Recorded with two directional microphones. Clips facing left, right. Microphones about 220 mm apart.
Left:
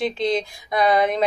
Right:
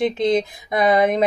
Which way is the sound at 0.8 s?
55° right (ahead or behind).